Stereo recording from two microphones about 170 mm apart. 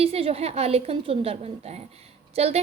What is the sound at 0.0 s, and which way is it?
Speech, 35° right (ahead or behind).